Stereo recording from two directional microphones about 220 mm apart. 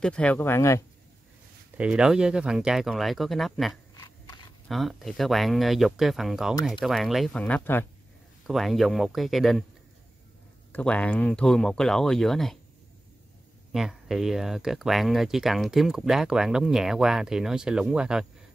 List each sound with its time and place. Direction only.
0.0 s speech: 5° left (ahead or behind)
1.8 s speech: 5° right (ahead or behind)
10.7 s speech: 5° left (ahead or behind)
13.7 s speech: centre (ahead or behind)